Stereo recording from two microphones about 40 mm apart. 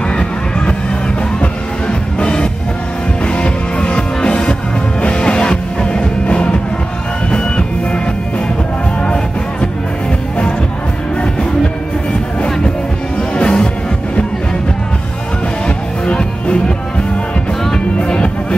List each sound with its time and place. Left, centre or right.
0.1 s music: left
9.0 s music: left
13.3 s music: left
15.6 s music: left
17.9 s music: left